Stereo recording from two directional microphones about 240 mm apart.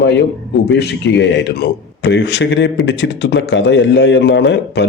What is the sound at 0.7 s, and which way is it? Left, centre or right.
Speech, left.